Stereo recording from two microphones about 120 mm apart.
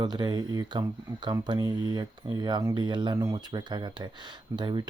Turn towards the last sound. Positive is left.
turn(degrees=-40)  # may be behind; listen again after turning